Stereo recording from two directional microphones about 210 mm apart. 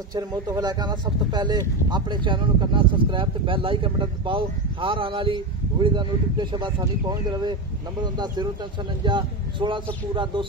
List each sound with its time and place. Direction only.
0.1 s speech: 20° right (ahead or behind)